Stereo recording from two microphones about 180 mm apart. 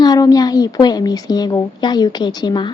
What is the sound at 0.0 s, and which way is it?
A woman's voice, 20° left (ahead or behind).